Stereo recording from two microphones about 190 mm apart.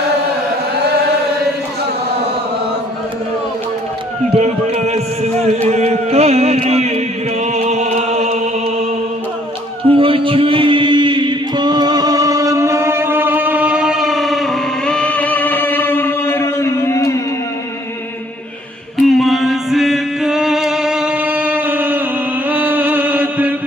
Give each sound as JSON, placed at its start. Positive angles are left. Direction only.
{"t": 0.7, "sound": "chant", "side_deg": -60}
{"t": 4.3, "sound": "a man's voice", "side_deg": -30}
{"t": 7.4, "sound": "music", "side_deg": -35}
{"t": 9.8, "sound": "chant", "side_deg": -30}
{"t": 19.0, "sound": "music", "side_deg": 0}
{"t": 22.4, "sound": "a sound", "side_deg": -10}